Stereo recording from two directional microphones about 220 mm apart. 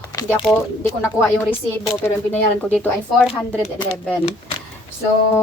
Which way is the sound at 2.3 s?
5° left (ahead or behind).